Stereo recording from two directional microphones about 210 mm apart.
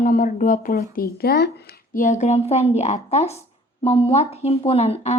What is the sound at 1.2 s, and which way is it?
A woman's voice, 50° left (ahead or behind).